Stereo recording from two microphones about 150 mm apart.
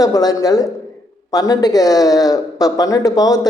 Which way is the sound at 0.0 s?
25° left (ahead or behind).